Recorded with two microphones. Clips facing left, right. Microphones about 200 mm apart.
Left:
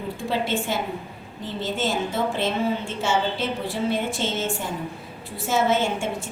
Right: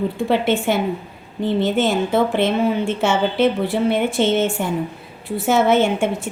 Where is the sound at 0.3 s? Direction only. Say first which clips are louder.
Right 6 dB; 65° right (ahead or behind).